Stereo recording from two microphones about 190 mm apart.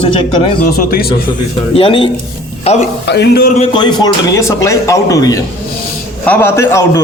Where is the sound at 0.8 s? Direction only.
50° left (ahead or behind).